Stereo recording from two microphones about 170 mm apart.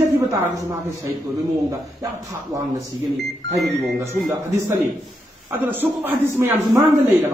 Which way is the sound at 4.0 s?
15° right (ahead or behind).